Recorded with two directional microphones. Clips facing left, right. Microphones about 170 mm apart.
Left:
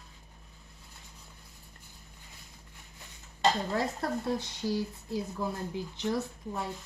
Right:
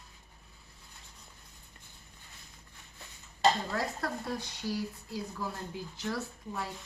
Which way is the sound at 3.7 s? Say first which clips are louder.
Left 3 dB; 25° left (ahead or behind).